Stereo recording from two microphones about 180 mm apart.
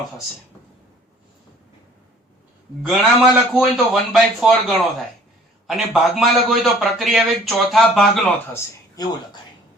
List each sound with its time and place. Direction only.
2.8 s a man's voice: 5° right (ahead or behind)
8.5 s speech: 20° left (ahead or behind)